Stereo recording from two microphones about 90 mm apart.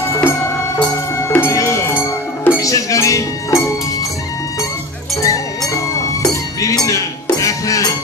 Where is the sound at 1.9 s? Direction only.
20° left (ahead or behind).